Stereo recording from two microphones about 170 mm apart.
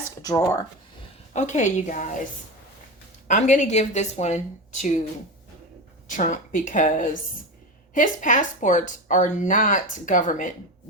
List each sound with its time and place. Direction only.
0.2 s a sound: 20° left (ahead or behind)
1.3 s speech: 45° left (ahead or behind)
3.2 s speech: 45° left (ahead or behind)
6.1 s speech: 50° left (ahead or behind)